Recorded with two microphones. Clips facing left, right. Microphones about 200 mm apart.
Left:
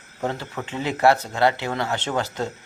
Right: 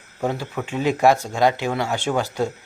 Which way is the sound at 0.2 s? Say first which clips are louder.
Right 3 dB; 10° right (ahead or behind).